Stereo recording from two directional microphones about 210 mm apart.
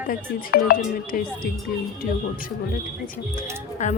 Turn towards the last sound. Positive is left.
turn(degrees=35)  # may be behind; listen again after turning